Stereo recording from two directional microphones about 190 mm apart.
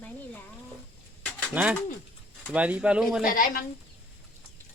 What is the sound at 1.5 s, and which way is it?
Speech, 5° right (ahead or behind).